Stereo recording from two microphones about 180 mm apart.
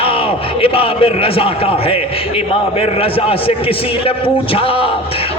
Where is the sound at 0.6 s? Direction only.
30° left (ahead or behind).